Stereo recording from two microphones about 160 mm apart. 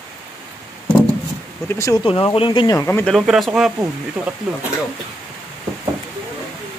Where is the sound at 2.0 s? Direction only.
30° left (ahead or behind); by 3.1 s 15° left (ahead or behind).